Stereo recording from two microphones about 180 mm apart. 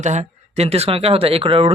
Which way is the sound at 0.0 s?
40° right (ahead or behind).